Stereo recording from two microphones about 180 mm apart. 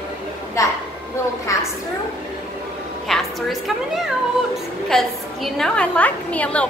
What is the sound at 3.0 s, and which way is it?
Music, centre (ahead or behind).